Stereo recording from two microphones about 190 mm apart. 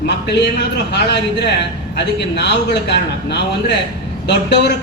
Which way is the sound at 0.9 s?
60° left (ahead or behind).